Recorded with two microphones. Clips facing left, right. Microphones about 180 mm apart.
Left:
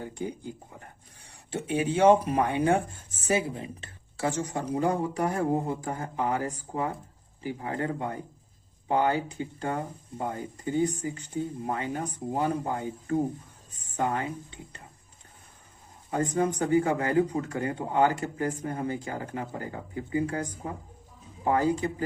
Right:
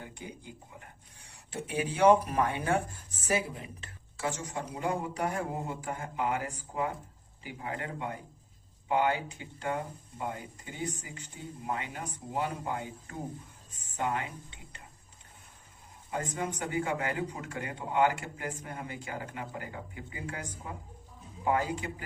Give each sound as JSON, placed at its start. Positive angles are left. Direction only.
{"t": 1.3, "sound": "speech", "side_deg": 30}
{"t": 4.4, "sound": "speech", "side_deg": 40}
{"t": 16.0, "sound": "speech", "side_deg": 40}